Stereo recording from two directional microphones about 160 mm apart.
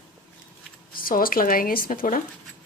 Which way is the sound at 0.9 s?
65° left (ahead or behind).